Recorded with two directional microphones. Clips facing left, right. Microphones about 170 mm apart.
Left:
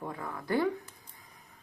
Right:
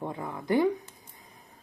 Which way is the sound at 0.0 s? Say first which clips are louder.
Right 4 dB; 20° right (ahead or behind).